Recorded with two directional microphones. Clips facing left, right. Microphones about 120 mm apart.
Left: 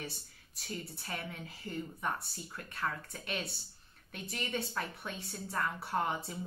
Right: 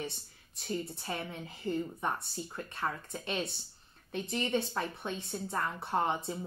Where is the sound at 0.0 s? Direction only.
25° right (ahead or behind).